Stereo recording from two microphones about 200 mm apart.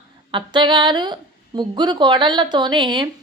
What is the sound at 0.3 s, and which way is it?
Speech, 25° right (ahead or behind).